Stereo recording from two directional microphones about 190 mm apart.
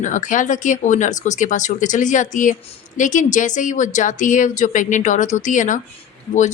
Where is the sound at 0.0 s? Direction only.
40° left (ahead or behind).